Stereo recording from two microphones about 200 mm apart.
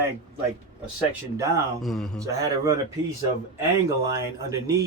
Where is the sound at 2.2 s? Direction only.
15° right (ahead or behind).